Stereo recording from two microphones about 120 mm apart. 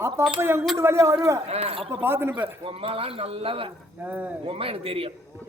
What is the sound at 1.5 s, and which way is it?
Speech, 55° right (ahead or behind).